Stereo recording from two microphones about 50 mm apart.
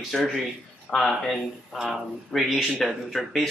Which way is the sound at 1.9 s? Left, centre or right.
Centre.